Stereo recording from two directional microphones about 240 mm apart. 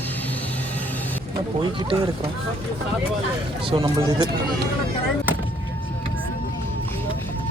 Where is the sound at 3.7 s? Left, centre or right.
Centre.